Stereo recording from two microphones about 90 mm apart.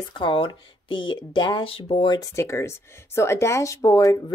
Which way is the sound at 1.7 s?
90° left.